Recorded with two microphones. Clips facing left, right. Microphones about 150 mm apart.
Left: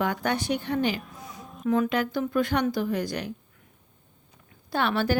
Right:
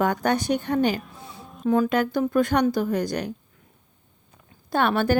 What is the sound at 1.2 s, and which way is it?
Music, 30° right (ahead or behind).